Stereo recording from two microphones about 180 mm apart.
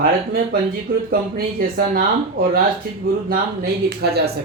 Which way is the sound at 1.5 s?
55° right (ahead or behind).